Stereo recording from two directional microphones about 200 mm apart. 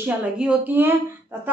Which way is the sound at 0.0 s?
5° right (ahead or behind).